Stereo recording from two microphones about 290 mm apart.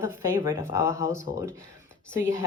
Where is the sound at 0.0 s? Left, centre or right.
Centre.